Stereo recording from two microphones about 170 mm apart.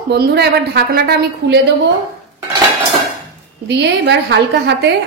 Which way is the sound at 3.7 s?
90° right.